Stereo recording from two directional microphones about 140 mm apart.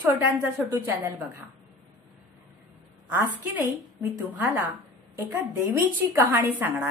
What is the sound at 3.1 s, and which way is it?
A woman's voice, 15° right (ahead or behind).